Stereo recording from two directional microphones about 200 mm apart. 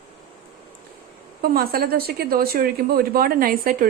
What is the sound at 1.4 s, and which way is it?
Speech, 50° right (ahead or behind).